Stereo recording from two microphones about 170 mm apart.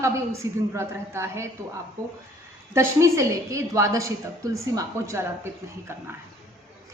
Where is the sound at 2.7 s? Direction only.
15° right (ahead or behind).